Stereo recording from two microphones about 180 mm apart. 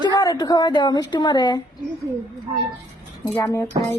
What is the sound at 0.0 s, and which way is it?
A woman's voice, 20° left (ahead or behind).